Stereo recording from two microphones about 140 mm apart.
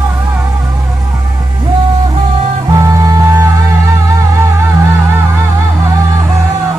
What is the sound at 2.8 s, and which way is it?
Music, 25° right (ahead or behind).